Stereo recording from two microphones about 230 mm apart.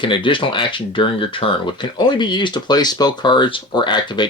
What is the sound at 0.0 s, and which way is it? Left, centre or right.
Speech, left.